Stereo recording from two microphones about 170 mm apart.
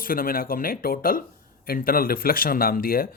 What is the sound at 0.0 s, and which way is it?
Speech, 55° left (ahead or behind).